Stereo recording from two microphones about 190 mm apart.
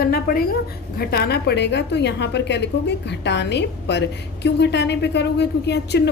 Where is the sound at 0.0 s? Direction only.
50° left (ahead or behind).